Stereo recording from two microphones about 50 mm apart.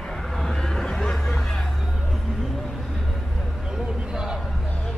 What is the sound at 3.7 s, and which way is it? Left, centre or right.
Basketball bounce, centre.